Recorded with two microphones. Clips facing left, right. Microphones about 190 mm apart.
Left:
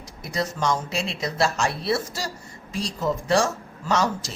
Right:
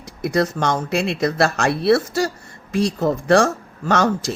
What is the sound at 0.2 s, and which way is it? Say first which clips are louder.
Speech: right 7 dB; 60° right (ahead or behind).